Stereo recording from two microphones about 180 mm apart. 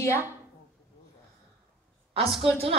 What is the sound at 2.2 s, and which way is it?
Speech, centre (ahead or behind).